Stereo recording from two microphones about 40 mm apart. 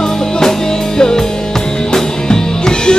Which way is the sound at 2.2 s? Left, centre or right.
Centre.